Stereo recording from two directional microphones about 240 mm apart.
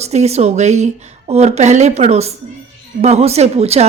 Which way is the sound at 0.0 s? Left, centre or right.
Right.